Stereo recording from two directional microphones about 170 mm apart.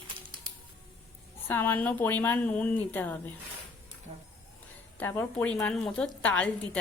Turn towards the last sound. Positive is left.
turn(degrees=10)  # may be behind; listen again after turning